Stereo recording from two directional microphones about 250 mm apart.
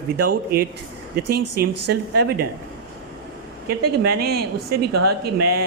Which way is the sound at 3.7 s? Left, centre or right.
Right.